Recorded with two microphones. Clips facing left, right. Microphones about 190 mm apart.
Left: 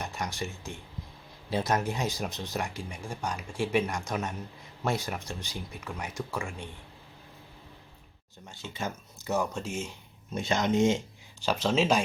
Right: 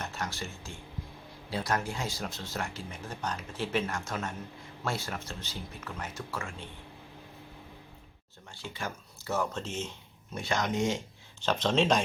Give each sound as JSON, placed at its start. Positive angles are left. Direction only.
{"t": 0.0, "sound": "a sound", "side_deg": 15}
{"t": 1.5, "sound": "speech", "side_deg": 20}
{"t": 8.6, "sound": "speech", "side_deg": 20}
{"t": 10.3, "sound": "speech", "side_deg": 20}
{"t": 11.4, "sound": "speech", "side_deg": 10}